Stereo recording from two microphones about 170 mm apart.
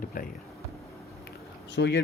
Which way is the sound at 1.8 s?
90° left.